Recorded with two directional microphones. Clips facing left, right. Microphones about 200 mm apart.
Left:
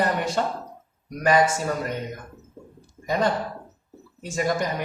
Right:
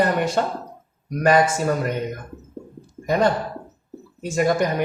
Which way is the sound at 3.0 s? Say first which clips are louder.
Right 4 dB; 60° right (ahead or behind).